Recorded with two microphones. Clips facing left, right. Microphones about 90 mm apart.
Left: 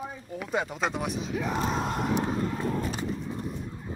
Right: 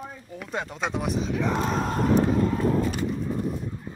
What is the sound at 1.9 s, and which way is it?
Vehicle, 40° right (ahead or behind).